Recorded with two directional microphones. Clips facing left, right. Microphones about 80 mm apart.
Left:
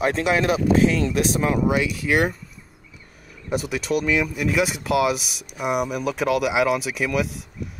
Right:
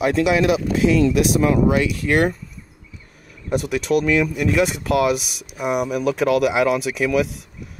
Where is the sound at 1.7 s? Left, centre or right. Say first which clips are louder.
Right 3 dB; centre.